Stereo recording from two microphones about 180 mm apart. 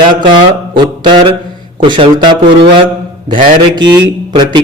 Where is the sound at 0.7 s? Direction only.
25° right (ahead or behind).